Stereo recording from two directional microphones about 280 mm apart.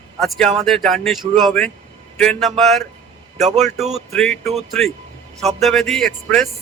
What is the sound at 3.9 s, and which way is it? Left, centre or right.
A man's voice, centre.